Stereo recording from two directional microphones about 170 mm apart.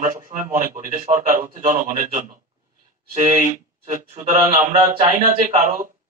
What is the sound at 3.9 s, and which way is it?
Speech, 50° right (ahead or behind).